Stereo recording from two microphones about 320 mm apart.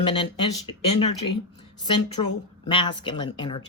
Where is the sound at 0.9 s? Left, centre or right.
Left.